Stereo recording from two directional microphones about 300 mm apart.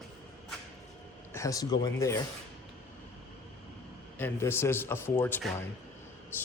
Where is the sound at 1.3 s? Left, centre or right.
Centre.